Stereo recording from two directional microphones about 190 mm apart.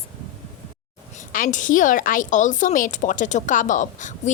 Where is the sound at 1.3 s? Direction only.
45° left (ahead or behind).